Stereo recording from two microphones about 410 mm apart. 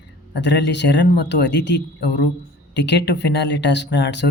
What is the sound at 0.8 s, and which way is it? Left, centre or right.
Speech, left.